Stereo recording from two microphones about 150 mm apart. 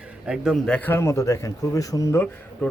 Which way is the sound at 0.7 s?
15° left (ahead or behind).